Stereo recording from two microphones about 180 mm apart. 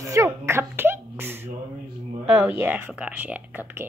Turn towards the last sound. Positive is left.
turn(degrees=-10)  # may be behind; listen again after turning